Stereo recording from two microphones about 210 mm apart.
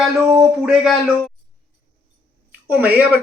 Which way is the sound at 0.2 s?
5° right (ahead or behind).